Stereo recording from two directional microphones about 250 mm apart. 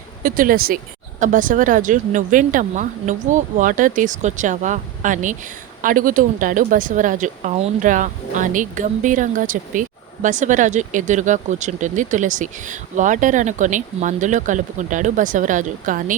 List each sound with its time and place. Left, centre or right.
0.2 s speech: right